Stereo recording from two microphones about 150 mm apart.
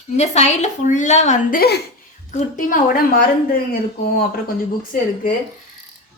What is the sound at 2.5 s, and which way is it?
Speech, 65° left (ahead or behind).